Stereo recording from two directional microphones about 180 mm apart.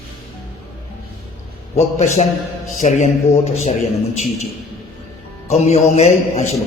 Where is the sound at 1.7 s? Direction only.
35° left (ahead or behind).